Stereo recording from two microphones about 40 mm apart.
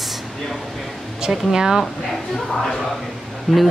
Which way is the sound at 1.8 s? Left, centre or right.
Centre.